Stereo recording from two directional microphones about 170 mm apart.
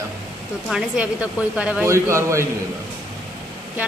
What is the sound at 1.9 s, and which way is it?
Speech, 15° right (ahead or behind).